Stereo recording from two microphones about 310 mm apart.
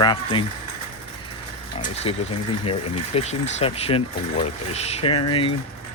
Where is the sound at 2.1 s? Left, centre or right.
Centre.